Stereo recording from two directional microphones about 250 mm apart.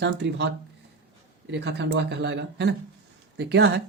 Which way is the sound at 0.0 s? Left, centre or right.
Right.